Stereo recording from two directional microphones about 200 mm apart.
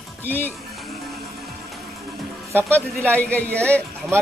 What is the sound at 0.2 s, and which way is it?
Speech, 10° left (ahead or behind).